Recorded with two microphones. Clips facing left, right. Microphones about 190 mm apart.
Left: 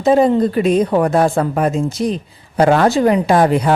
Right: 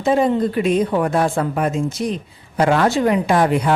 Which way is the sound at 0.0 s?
40° left (ahead or behind).